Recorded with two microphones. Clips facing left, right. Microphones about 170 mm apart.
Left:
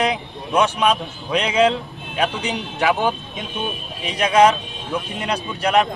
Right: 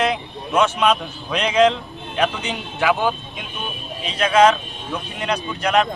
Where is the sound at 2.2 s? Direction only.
15° left (ahead or behind).